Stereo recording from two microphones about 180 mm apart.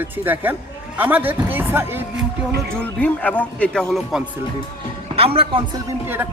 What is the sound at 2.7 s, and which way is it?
Speech, 10° left (ahead or behind).